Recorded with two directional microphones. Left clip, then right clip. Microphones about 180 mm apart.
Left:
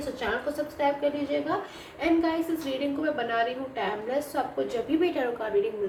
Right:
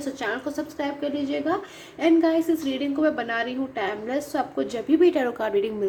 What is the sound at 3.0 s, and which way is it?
A woman's voice, 50° right (ahead or behind).